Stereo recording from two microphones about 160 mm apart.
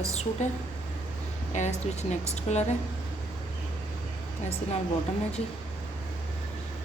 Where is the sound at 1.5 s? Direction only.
45° left (ahead or behind).